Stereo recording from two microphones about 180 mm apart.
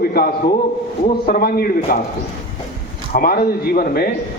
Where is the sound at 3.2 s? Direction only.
55° left (ahead or behind).